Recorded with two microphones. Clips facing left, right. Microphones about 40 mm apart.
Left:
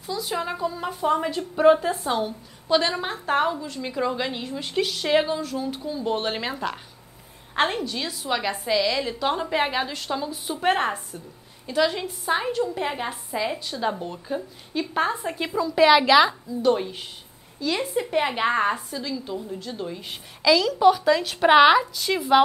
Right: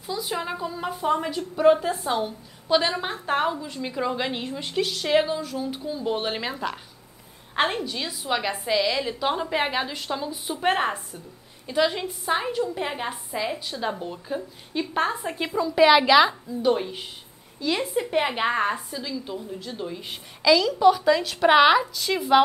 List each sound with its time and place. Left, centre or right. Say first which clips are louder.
0.0 s a woman's voice: left 1 dB; centre
1.9 s a woman's voice: left 1 dB; centre
4.3 s a woman's voice: right 1 dB; right
4.7 s a woman's voice: even; centre